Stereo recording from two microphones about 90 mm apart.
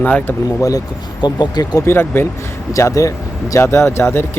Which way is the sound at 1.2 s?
50° left (ahead or behind).